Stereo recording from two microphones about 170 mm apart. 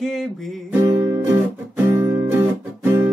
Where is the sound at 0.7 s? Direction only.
20° right (ahead or behind).